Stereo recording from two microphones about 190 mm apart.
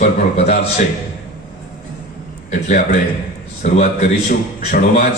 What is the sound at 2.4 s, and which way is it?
A man's voice, 40° left (ahead or behind).